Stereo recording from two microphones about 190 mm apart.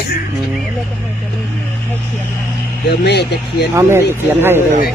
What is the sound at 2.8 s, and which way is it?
Speech, 60° left (ahead or behind).